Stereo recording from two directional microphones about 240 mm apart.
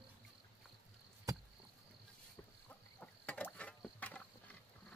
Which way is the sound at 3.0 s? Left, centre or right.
Centre.